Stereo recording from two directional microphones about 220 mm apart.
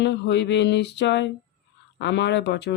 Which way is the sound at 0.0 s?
50° left (ahead or behind).